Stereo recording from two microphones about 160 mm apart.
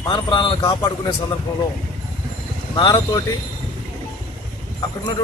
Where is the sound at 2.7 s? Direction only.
30° left (ahead or behind).